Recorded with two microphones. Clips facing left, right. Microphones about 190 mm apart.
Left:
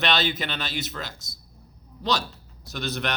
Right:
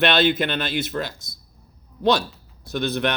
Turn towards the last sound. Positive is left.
turn(degrees=-55)  # may be behind; listen again after turning